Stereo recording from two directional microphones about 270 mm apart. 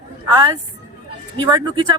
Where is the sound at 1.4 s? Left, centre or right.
Centre.